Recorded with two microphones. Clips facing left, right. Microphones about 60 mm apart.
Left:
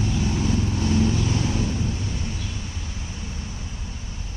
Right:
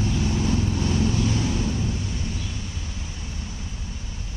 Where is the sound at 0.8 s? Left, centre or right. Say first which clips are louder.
Left 2 dB; left.